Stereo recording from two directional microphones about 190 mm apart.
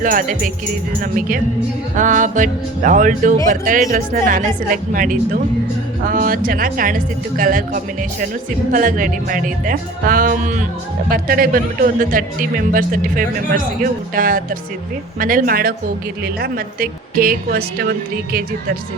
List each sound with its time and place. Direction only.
0.0 s speech: 45° right (ahead or behind)
2.0 s speech: 40° right (ahead or behind)